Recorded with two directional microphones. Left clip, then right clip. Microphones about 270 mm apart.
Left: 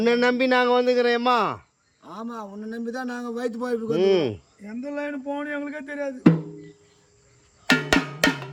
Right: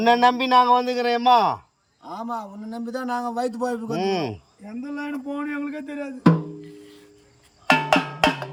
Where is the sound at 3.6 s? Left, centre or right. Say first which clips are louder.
Left 2 dB; centre.